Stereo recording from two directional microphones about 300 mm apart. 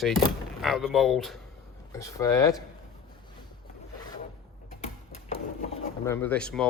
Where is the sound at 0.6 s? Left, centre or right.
Centre.